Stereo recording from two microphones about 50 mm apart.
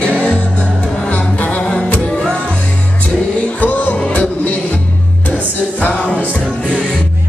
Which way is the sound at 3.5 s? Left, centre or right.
Left.